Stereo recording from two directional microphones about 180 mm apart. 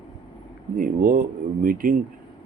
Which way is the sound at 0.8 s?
50° right (ahead or behind).